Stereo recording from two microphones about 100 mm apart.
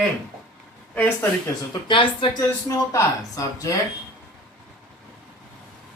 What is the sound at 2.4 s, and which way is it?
Speech, 30° left (ahead or behind).